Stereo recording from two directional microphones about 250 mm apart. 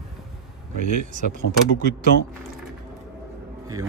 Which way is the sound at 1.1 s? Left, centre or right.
Right.